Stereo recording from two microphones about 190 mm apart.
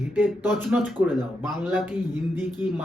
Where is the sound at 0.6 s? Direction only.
10° right (ahead or behind).